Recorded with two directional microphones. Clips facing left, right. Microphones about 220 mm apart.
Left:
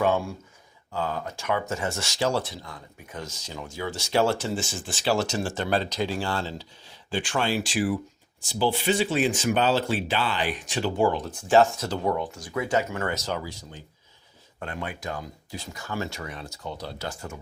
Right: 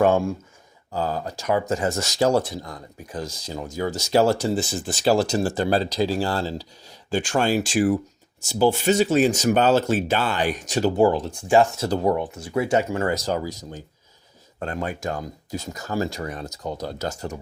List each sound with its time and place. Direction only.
0.9 s speech: 35° right (ahead or behind)
12.1 s speech: 20° right (ahead or behind); by 17.4 s 40° right (ahead or behind)